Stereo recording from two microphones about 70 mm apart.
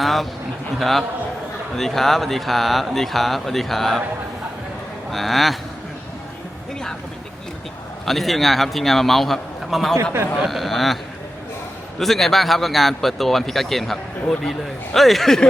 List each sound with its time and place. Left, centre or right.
0.0 s a sound: centre
0.8 s speech: centre
5.1 s speech: centre
8.0 s speech: centre
10.0 s speech: right
10.3 s speech: centre
11.9 s speech: centre